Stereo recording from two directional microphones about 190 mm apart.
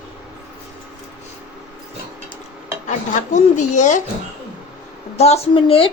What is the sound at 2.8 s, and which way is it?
Speech, 40° left (ahead or behind).